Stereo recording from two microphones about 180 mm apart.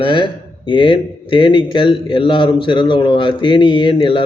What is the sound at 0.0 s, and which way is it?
A man's voice, 25° left (ahead or behind).